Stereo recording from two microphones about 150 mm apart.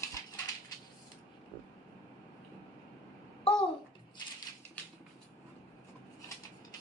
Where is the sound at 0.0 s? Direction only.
20° left (ahead or behind).